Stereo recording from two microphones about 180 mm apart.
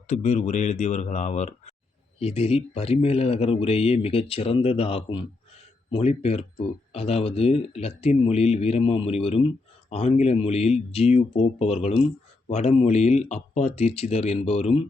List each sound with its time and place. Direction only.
0.1 s speech: 40° left (ahead or behind)